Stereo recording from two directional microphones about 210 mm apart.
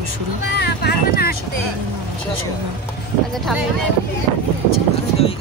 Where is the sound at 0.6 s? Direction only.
50° left (ahead or behind).